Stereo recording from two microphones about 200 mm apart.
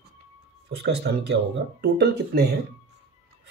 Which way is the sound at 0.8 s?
55° right (ahead or behind).